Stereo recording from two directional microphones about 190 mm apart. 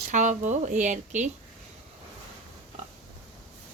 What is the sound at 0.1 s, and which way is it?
Speech, 40° right (ahead or behind).